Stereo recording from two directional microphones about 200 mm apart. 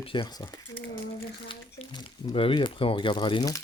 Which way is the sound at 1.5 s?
25° left (ahead or behind).